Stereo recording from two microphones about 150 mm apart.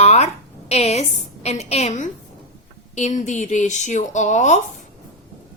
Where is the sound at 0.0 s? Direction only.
45° left (ahead or behind).